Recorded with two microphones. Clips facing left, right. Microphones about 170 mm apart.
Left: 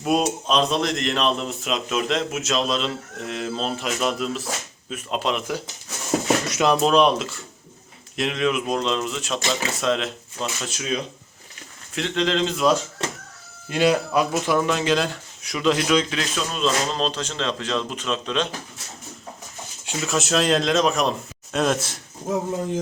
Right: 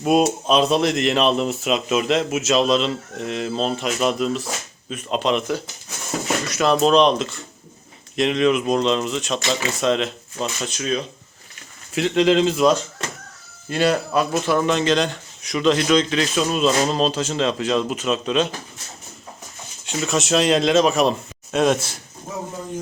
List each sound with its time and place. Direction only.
0.0 s speech: 5° right (ahead or behind)
6.2 s dishes: 20° left (ahead or behind)
6.8 s speech: 5° left (ahead or behind)
11.9 s speech: 10° right (ahead or behind)
13.7 s speech: 15° left (ahead or behind)
16.5 s speech: 10° right (ahead or behind)
19.8 s speech: 5° left (ahead or behind)